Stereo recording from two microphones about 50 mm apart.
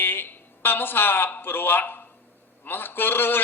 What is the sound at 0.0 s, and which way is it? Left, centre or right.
A man's voice, left.